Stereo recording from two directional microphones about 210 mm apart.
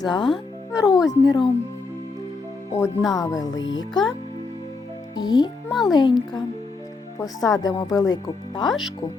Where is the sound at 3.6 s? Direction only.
65° left (ahead or behind).